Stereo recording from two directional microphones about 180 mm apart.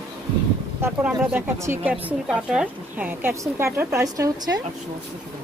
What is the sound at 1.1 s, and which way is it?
Speech, 10° right (ahead or behind).